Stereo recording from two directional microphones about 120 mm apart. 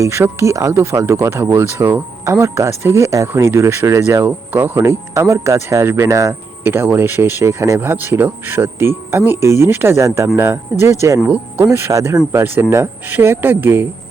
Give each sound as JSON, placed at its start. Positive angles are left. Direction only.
{"t": 0.0, "sound": "speech", "side_deg": -25}